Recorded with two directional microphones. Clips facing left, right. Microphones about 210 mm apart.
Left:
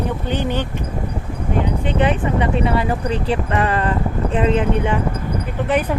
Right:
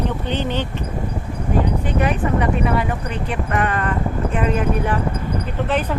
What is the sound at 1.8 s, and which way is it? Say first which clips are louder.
Speech: left 2 dB; 25° left (ahead or behind).